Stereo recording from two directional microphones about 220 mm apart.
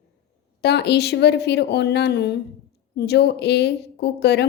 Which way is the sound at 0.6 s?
50° left (ahead or behind).